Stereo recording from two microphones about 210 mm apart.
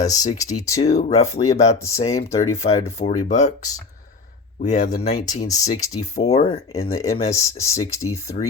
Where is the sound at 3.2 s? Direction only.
35° left (ahead or behind).